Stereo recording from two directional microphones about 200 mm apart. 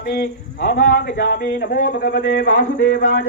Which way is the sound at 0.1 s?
50° left (ahead or behind).